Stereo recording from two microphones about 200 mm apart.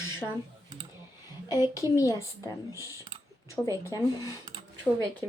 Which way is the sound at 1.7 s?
15° left (ahead or behind).